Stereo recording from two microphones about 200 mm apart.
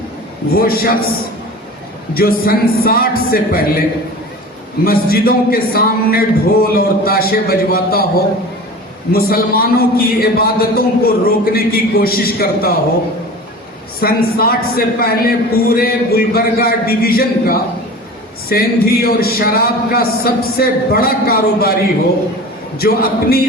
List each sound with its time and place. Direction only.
0.5 s a man's voice: 50° left (ahead or behind)
2.1 s a man's voice: 50° left (ahead or behind)
4.9 s a man's voice: 50° left (ahead or behind)
9.1 s a man's voice: 50° left (ahead or behind)
14.0 s a man's voice: 50° left (ahead or behind)
22.8 s a man's voice: 50° left (ahead or behind)